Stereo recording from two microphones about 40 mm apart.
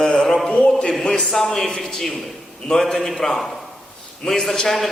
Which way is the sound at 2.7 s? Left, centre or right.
Centre.